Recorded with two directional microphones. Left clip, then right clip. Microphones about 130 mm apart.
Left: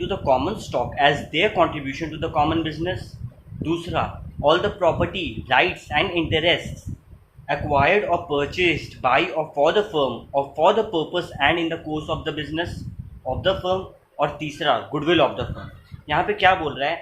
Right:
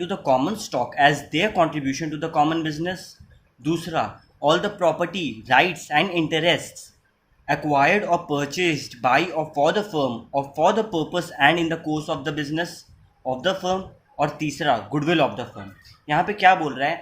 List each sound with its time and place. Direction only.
0.0 s speech: 55° right (ahead or behind)
13.2 s speech: 60° right (ahead or behind)
14.2 s speech: 45° right (ahead or behind)
16.0 s speech: 50° right (ahead or behind)